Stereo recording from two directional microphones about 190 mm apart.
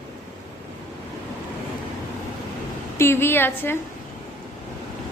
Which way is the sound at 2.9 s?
15° left (ahead or behind).